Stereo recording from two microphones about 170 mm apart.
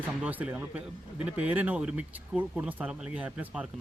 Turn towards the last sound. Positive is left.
turn(degrees=-5)  # may be behind; listen again after turning